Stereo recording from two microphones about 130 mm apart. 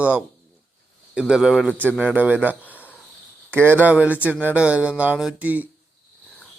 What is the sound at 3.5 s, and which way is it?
Speech, 15° right (ahead or behind).